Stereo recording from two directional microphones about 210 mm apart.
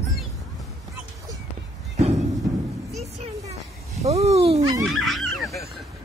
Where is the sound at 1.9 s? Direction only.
30° right (ahead or behind).